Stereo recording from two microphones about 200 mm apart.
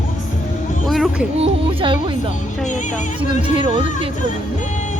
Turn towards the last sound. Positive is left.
turn(degrees=-25)  # may be behind; listen again after turning